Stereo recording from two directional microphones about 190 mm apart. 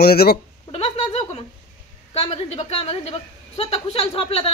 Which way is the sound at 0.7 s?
30° left (ahead or behind).